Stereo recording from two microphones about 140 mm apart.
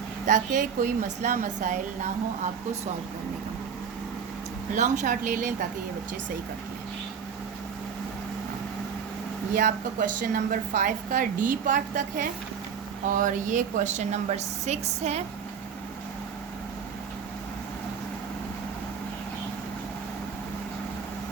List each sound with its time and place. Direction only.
0.3 s a woman's voice: 60° right (ahead or behind)
4.7 s a woman's voice: 65° right (ahead or behind)
9.6 s a woman's voice: 70° right (ahead or behind); by 15.2 s 50° right (ahead or behind)